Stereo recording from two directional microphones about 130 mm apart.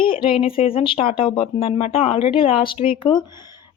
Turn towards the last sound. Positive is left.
turn(degrees=40)  # may be behind; listen again after turning